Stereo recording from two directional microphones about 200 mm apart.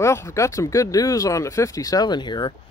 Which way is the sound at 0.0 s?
15° left (ahead or behind).